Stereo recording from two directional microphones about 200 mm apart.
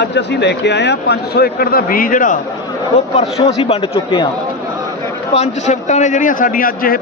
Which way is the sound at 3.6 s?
30° left (ahead or behind).